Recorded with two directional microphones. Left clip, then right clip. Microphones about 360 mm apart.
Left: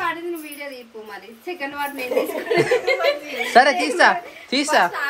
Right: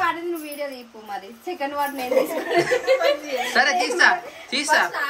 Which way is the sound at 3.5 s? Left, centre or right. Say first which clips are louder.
Left 5 dB; centre.